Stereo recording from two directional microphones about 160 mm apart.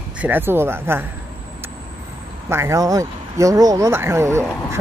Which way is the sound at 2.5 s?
15° right (ahead or behind).